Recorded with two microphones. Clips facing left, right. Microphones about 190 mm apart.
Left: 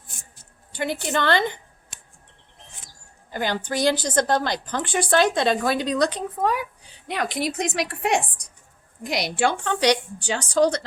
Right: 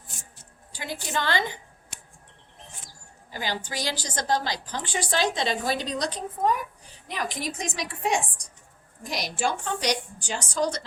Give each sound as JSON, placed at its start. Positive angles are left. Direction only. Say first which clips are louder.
{"t": 0.7, "sound": "a woman's voice", "louder": "left 7 dB", "side_deg": 60}
{"t": 3.3, "sound": "a woman's voice", "louder": "left 6 dB", "side_deg": 55}